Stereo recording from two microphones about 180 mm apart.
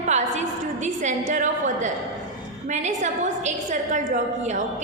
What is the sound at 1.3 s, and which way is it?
A woman's voice, 45° right (ahead or behind).